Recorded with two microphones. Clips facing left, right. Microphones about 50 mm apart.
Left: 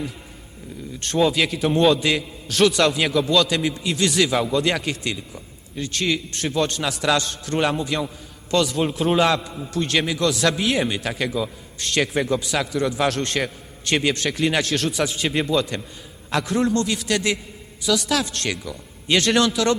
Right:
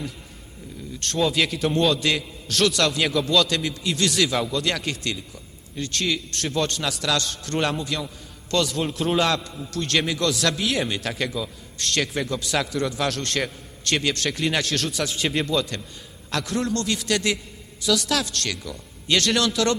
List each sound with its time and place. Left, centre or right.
0.9 s a man's voice: centre
4.8 s a man's voice: centre
7.0 s a man's voice: left
7.3 s a man's voice: centre
14.3 s a man's voice: centre
18.3 s a man's voice: left
19.3 s a man's voice: centre